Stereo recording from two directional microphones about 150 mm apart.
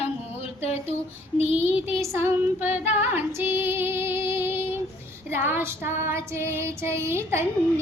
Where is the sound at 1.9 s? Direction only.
20° right (ahead or behind).